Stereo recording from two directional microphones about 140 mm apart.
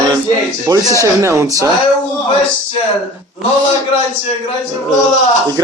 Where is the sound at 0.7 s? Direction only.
25° right (ahead or behind).